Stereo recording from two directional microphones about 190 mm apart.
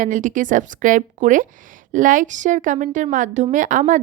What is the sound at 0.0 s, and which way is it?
A woman's voice, 40° right (ahead or behind).